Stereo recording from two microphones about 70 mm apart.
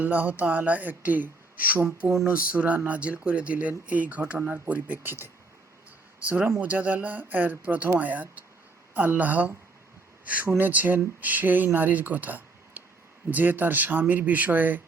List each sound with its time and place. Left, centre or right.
0.0 s speech: right
2.0 s a sound: right
2.3 s speech: right